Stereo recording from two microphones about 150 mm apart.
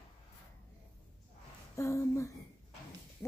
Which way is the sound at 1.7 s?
20° left (ahead or behind).